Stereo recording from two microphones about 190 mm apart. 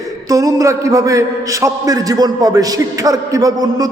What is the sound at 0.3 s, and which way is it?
A man's voice, 15° right (ahead or behind).